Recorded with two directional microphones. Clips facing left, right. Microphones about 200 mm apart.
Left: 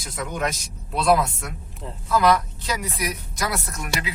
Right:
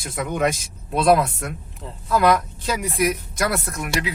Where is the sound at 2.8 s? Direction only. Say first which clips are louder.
Right 7 dB; 50° right (ahead or behind).